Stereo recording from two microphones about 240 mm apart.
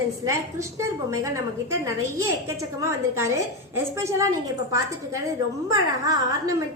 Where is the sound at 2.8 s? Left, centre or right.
Centre.